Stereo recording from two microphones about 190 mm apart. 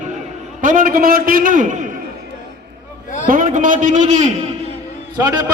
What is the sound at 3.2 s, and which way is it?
A man's voice, 45° right (ahead or behind).